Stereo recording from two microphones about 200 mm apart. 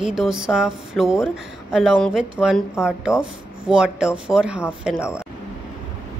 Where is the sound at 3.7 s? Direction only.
5° right (ahead or behind).